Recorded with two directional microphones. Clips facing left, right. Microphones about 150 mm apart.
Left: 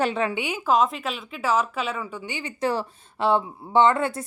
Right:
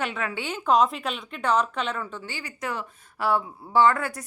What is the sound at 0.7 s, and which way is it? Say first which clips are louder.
Speech: right 1 dB; centre (ahead or behind).